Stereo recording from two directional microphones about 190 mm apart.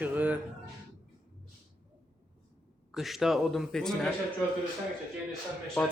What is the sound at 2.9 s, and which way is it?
A man's voice, centre (ahead or behind).